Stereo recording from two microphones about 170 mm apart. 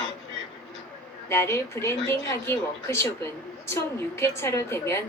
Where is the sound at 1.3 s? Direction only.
15° left (ahead or behind).